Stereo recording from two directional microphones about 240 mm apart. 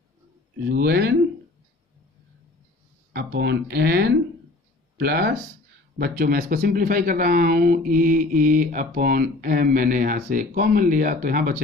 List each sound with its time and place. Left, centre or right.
0.7 s speech: right
3.1 s speech: right